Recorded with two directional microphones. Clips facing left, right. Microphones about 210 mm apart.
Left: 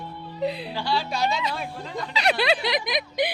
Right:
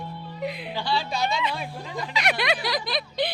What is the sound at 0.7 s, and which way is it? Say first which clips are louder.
A woman's voice: left 1 dB; 10° left (ahead or behind).